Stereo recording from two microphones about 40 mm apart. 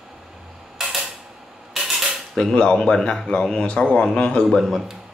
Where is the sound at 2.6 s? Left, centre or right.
Left.